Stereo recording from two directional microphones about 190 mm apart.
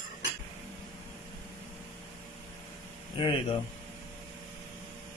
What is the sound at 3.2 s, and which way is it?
Speech, 25° left (ahead or behind).